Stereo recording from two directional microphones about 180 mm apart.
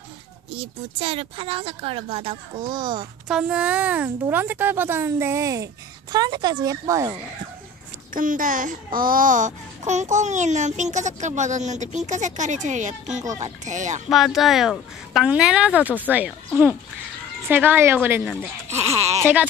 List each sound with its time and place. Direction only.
0.6 s speech: 30° right (ahead or behind)
3.3 s speech: 5° right (ahead or behind)
8.1 s speech: 50° right (ahead or behind)
14.0 s speech: centre (ahead or behind)
17.5 s speech: 10° right (ahead or behind)